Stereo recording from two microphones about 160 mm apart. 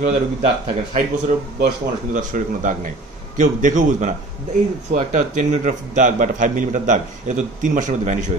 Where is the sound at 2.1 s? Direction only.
55° right (ahead or behind).